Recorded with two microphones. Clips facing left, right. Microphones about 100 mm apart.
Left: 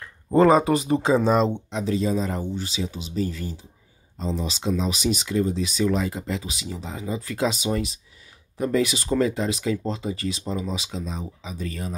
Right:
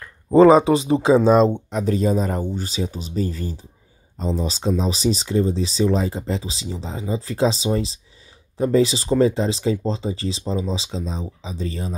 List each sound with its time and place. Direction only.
0.6 s speech: 25° right (ahead or behind)
1.5 s speech: 45° right (ahead or behind); by 11.9 s 25° right (ahead or behind)